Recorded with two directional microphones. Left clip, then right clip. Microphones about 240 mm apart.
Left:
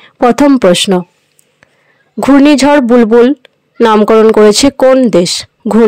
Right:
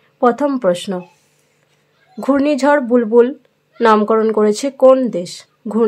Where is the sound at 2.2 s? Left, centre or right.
Left.